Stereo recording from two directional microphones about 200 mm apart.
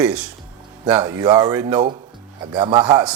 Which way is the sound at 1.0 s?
20° right (ahead or behind).